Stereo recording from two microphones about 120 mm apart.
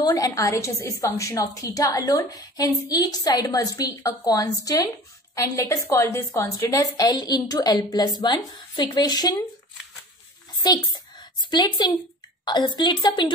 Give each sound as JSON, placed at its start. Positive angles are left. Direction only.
{"t": 0.0, "sound": "a woman's voice", "side_deg": 35}
{"t": 10.6, "sound": "a woman's voice", "side_deg": 35}